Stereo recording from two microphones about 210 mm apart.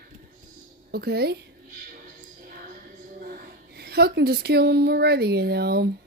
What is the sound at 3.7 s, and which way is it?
A woman's voice, 50° right (ahead or behind).